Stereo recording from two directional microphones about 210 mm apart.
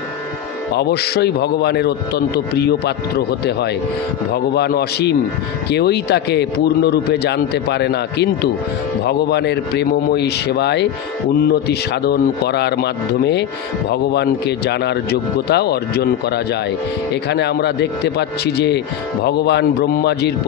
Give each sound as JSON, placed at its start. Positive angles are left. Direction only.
{"t": 0.7, "sound": "a man's voice", "side_deg": 50}